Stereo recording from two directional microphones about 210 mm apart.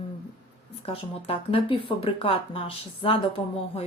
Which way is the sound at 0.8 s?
30° left (ahead or behind).